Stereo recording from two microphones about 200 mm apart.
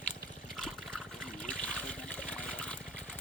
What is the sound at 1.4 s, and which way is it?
Water, 5° left (ahead or behind).